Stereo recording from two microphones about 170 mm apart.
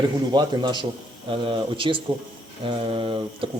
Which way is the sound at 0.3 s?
25° right (ahead or behind).